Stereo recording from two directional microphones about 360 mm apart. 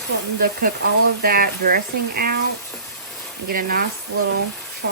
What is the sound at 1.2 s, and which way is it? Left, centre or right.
Speech, right.